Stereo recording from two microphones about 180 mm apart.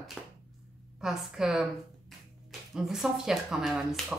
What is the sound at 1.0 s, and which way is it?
Speech, centre (ahead or behind).